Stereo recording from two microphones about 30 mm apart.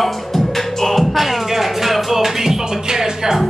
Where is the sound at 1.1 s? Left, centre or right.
Centre.